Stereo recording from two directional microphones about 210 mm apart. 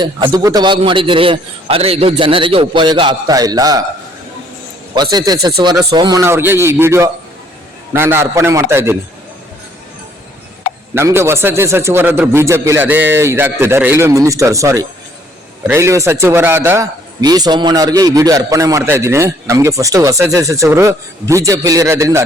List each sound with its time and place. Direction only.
0.0 s a man's voice: 20° right (ahead or behind)
5.1 s a man's voice: 20° right (ahead or behind)
10.9 s a man's voice: 10° right (ahead or behind)